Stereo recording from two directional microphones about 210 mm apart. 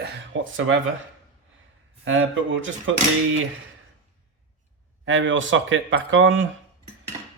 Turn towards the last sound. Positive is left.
turn(degrees=-65)  # may be behind; listen again after turning